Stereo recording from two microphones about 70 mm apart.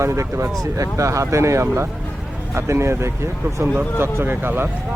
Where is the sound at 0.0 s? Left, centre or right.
Right.